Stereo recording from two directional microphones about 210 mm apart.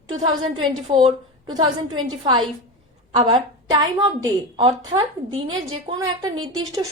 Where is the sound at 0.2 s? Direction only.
25° right (ahead or behind).